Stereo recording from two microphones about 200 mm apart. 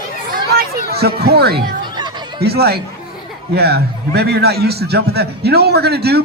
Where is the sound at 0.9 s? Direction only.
50° right (ahead or behind).